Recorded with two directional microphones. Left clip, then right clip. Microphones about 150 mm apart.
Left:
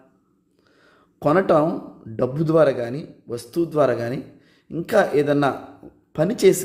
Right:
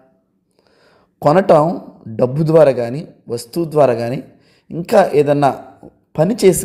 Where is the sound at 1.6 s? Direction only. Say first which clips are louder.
Right 5 dB; 20° right (ahead or behind).